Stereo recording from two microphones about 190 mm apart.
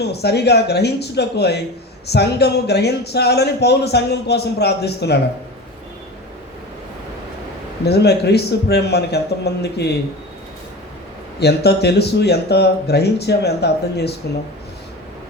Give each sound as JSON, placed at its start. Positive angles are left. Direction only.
{"t": 0.0, "sound": "speech", "side_deg": 60}
{"t": 7.9, "sound": "speech", "side_deg": 60}
{"t": 11.3, "sound": "speech", "side_deg": 60}